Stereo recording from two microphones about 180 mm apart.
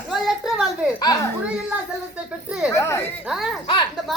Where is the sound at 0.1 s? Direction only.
Centre (ahead or behind).